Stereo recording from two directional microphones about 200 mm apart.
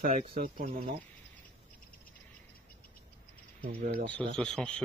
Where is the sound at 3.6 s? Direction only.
50° right (ahead or behind).